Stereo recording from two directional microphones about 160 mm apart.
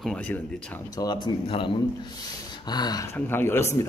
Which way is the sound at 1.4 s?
35° left (ahead or behind).